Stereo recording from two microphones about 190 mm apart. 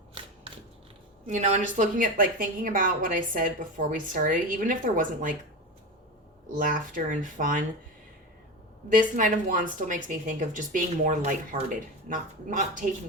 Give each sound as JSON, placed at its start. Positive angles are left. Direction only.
{"t": 1.3, "sound": "a woman's voice", "side_deg": -40}
{"t": 6.6, "sound": "a woman's voice", "side_deg": -45}
{"t": 8.9, "sound": "a woman's voice", "side_deg": -45}